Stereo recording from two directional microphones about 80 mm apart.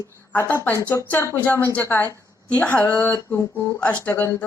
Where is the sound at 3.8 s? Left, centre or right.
Centre.